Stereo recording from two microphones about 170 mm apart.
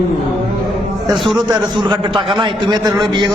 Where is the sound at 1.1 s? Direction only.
Centre (ahead or behind).